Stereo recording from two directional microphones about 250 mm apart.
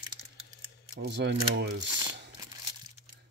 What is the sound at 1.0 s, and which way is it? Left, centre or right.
Speech, right.